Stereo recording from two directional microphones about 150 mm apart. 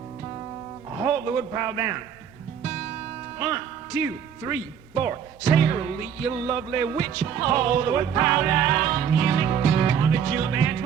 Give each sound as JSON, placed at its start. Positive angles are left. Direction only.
{"t": 0.9, "sound": "a man's voice", "side_deg": -20}
{"t": 3.3, "sound": "speech", "side_deg": -25}
{"t": 6.2, "sound": "music", "side_deg": -25}